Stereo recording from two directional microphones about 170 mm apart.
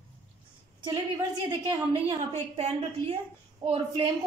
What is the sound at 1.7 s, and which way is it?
A woman's voice, 30° right (ahead or behind).